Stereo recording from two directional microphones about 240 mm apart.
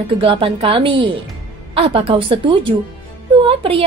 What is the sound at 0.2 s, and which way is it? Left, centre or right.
A woman's voice, right.